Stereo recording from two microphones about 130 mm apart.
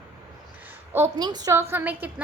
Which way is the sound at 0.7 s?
20° right (ahead or behind).